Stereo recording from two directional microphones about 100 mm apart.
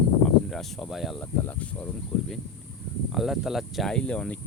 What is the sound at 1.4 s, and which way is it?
Speech, 15° left (ahead or behind).